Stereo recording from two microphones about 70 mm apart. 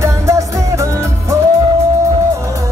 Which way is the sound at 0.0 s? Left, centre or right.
Right.